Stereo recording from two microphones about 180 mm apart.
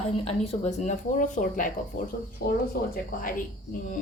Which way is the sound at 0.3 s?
35° left (ahead or behind).